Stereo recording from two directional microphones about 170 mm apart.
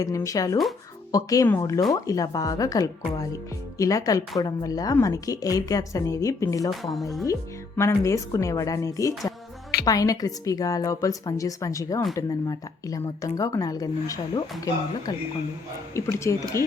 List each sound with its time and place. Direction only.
0.0 s a woman's voice: 20° left (ahead or behind)
6.7 s speech: centre (ahead or behind)
7.8 s a woman's voice: 15° left (ahead or behind)
16.0 s speech: 15° left (ahead or behind)